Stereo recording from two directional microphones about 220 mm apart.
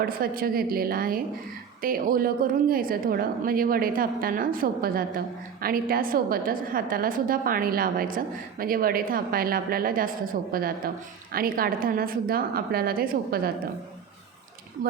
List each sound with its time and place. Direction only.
0.0 s a woman's voice: 40° right (ahead or behind)